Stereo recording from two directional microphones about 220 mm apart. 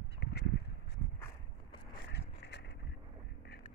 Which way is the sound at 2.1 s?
50° left (ahead or behind).